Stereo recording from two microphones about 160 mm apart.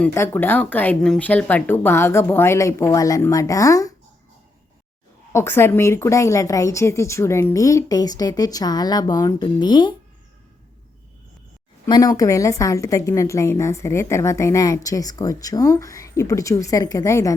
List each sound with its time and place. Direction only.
0.0 s speech: 15° left (ahead or behind)
5.3 s a woman's voice: 15° left (ahead or behind)
11.9 s a woman's voice: 25° left (ahead or behind)